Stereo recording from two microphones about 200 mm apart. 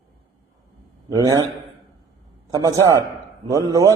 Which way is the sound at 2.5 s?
15° right (ahead or behind).